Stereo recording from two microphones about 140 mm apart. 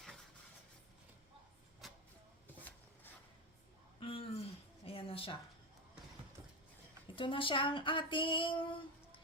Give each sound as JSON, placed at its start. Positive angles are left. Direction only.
{"t": 1.8, "sound": "vehicle", "side_deg": 0}
{"t": 4.0, "sound": "a sound", "side_deg": 40}
{"t": 7.2, "sound": "speech", "side_deg": 40}